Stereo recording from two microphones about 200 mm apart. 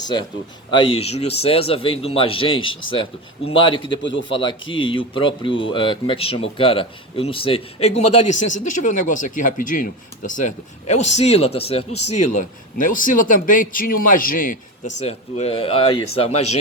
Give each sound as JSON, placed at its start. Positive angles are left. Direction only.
{"t": 0.0, "sound": "a man's voice", "side_deg": 20}
{"t": 12.4, "sound": "a man's voice", "side_deg": 40}
{"t": 14.9, "sound": "speech", "side_deg": 30}